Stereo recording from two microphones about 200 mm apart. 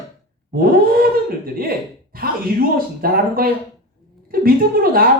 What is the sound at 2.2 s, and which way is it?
Speech, 45° right (ahead or behind).